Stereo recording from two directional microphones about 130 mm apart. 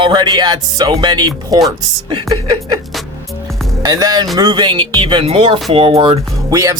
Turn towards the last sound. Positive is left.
turn(degrees=-25)  # may be behind; listen again after turning